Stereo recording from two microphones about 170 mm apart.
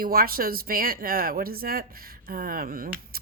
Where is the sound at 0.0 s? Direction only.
60° right (ahead or behind).